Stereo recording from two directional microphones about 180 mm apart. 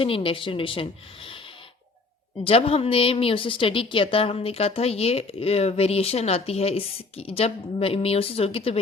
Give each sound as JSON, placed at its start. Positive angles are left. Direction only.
{"t": 0.0, "sound": "a woman's voice", "side_deg": 30}
{"t": 2.4, "sound": "a woman's voice", "side_deg": 35}